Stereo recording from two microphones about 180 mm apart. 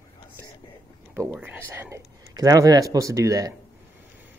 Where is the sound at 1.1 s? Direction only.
10° right (ahead or behind).